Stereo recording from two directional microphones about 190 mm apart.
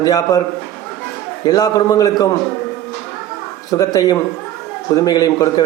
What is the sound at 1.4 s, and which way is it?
Speech, 20° left (ahead or behind).